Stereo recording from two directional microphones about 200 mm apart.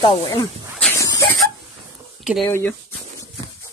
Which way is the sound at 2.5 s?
10° left (ahead or behind).